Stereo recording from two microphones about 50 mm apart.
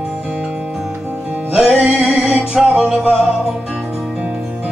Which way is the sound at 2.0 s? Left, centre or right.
Centre.